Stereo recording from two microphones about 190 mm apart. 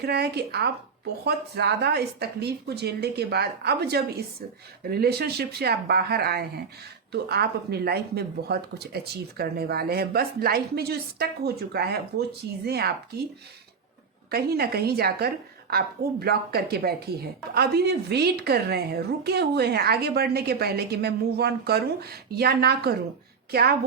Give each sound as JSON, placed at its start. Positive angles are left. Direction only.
{"t": 0.0, "sound": "a woman's voice", "side_deg": -55}
{"t": 14.3, "sound": "a woman's voice", "side_deg": -55}